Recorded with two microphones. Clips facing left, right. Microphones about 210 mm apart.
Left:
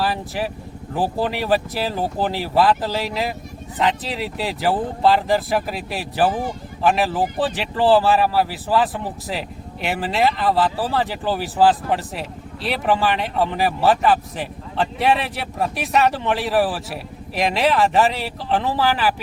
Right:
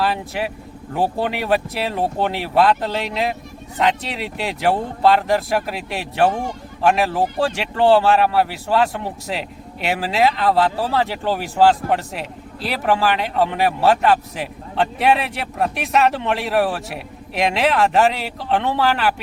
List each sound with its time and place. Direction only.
0.0 s speech: centre (ahead or behind)